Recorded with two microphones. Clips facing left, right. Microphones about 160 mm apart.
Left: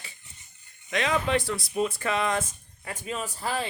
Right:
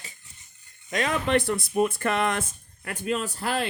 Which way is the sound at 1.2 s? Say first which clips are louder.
Right 3 dB; 55° right (ahead or behind).